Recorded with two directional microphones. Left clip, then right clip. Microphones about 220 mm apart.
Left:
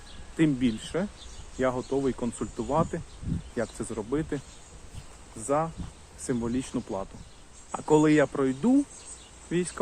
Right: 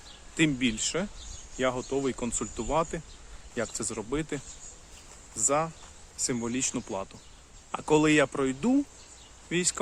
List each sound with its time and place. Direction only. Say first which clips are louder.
0.3 s speech: even; 20° right (ahead or behind)
5.5 s speech: left 1 dB; 20° right (ahead or behind)